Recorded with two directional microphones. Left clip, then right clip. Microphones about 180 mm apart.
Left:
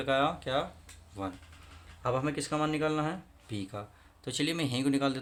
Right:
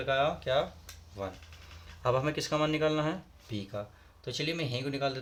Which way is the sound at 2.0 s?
5° left (ahead or behind).